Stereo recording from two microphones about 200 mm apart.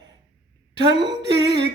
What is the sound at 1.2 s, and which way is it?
Music, 60° right (ahead or behind).